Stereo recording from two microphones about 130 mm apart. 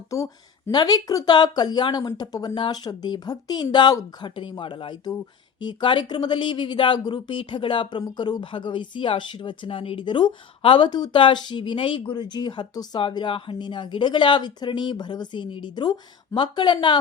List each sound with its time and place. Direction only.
0.7 s speech: 30° left (ahead or behind)